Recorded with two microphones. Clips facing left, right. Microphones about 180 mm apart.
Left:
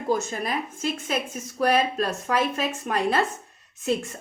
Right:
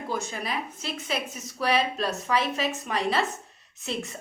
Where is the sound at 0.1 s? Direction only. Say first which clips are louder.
Left 6 dB; 45° left (ahead or behind).